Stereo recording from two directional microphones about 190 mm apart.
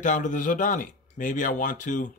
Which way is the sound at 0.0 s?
40° left (ahead or behind).